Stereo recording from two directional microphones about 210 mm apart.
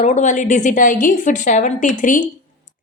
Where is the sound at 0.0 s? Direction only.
35° left (ahead or behind).